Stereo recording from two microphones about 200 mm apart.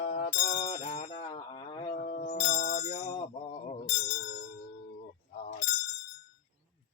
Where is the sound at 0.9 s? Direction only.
35° left (ahead or behind).